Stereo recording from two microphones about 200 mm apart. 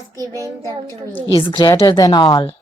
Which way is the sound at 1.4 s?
25° left (ahead or behind).